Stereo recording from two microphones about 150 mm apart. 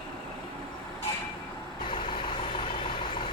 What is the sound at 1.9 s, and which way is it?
Vehicle, 35° left (ahead or behind).